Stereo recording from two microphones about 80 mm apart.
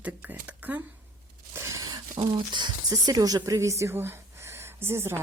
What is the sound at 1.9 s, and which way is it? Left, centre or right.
Speech, right.